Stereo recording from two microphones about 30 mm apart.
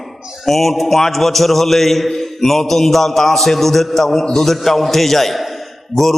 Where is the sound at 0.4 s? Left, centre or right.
Centre.